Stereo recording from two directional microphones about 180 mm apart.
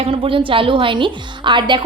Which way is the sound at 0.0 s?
30° right (ahead or behind).